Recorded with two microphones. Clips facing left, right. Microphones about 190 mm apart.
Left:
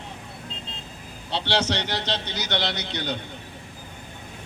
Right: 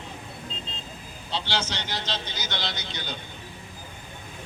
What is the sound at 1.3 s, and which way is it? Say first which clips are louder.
A man's voice: left 5 dB; 65° left (ahead or behind).